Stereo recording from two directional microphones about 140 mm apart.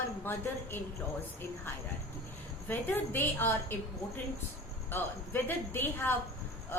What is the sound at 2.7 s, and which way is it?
A woman's voice, 15° left (ahead or behind).